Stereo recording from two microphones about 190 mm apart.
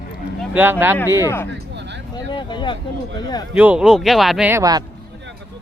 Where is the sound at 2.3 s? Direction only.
25° left (ahead or behind).